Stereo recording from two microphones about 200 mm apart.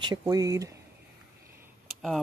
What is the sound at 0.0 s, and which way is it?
Speech, 20° right (ahead or behind).